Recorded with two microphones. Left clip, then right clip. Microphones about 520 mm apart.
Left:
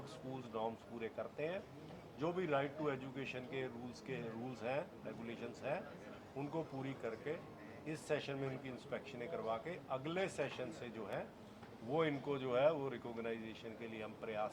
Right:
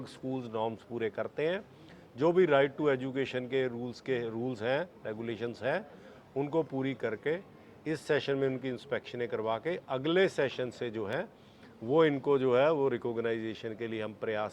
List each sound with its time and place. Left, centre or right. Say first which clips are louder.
0.0 s speech: right 10 dB; right